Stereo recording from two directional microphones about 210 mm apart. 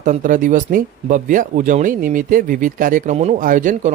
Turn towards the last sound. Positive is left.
turn(degrees=-40)  # may be behind; listen again after turning